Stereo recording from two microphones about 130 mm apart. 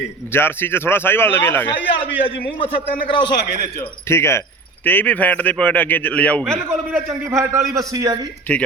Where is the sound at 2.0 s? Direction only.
45° left (ahead or behind).